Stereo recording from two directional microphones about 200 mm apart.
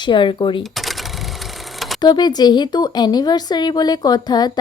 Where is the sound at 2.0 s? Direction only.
20° left (ahead or behind).